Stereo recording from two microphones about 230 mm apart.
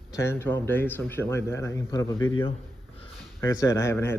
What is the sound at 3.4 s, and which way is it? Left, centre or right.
Speech, centre.